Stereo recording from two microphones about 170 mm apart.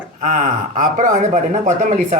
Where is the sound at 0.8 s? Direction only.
45° right (ahead or behind).